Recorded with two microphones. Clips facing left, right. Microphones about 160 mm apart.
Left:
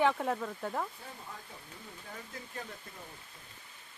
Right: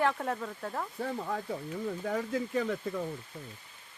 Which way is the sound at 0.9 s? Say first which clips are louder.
Right 14 dB; 90° right.